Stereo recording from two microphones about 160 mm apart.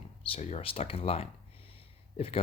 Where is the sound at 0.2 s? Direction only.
40° left (ahead or behind).